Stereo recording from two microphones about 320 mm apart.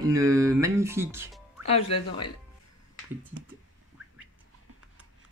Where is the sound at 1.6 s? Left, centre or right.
Centre.